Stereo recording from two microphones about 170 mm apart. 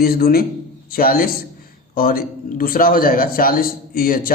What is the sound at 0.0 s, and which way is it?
A man's voice, 60° left (ahead or behind).